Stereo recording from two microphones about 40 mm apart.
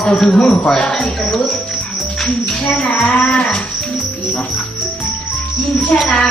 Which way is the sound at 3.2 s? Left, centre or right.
Left.